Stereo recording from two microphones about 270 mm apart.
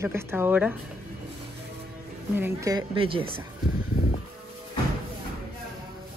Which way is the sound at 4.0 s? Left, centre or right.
Left.